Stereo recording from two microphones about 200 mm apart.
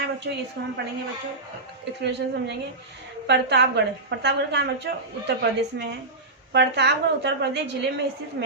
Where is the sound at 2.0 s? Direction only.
60° right (ahead or behind).